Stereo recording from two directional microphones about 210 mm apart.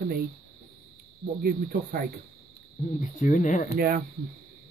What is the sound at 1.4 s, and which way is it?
Speech, 45° right (ahead or behind).